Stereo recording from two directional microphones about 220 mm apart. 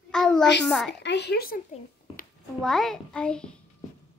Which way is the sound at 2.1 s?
25° left (ahead or behind).